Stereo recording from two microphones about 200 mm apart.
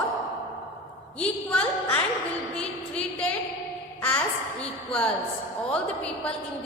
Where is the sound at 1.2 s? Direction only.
5° left (ahead or behind).